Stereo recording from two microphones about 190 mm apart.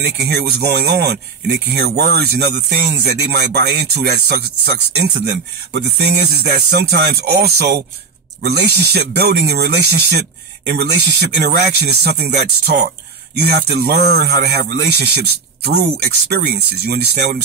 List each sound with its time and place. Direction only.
0.2 s speech: 60° right (ahead or behind)